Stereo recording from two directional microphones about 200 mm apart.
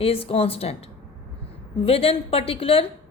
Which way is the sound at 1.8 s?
30° left (ahead or behind).